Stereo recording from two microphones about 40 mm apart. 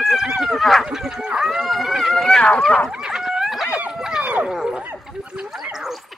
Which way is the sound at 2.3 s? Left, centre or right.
Left.